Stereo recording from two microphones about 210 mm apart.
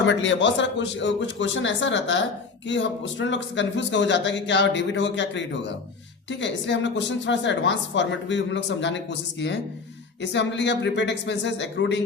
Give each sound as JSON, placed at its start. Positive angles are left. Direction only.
{"t": 0.0, "sound": "speech", "side_deg": 60}